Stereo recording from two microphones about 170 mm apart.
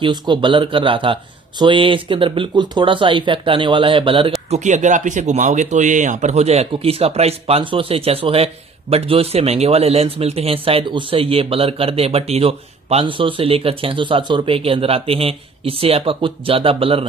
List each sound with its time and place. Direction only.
0.0 s speech: 30° right (ahead or behind)
4.5 s a man's voice: 45° right (ahead or behind)